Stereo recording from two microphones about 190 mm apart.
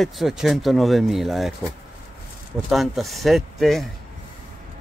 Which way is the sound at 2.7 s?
Centre (ahead or behind).